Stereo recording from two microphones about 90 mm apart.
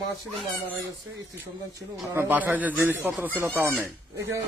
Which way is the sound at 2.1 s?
20° right (ahead or behind).